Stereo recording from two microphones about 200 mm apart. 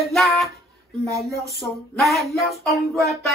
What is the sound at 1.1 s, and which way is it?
Speech, 15° right (ahead or behind).